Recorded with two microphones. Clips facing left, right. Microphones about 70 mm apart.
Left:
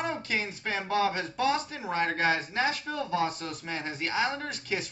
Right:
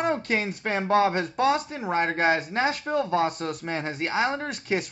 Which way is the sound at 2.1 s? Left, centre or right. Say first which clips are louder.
Right 4 dB; right.